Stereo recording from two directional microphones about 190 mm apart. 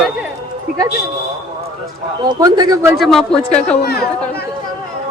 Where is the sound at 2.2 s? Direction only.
20° right (ahead or behind).